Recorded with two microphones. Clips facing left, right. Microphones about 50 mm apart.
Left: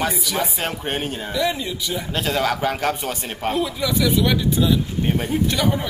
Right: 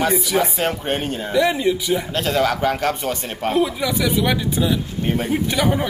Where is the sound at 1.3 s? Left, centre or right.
Centre.